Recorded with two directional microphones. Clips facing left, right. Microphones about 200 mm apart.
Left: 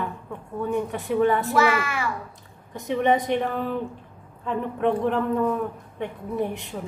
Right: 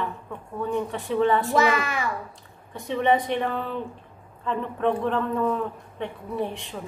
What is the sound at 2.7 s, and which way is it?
A woman's voice, 15° left (ahead or behind).